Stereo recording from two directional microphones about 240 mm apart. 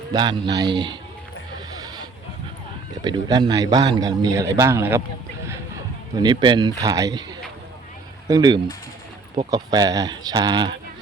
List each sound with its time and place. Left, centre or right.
0.1 s speech: centre
1.7 s a sound: centre
3.0 s speech: centre
6.1 s speech: centre
8.3 s speech: centre